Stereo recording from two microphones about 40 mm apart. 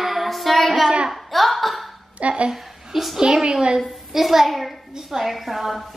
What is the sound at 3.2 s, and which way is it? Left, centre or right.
Speech, centre.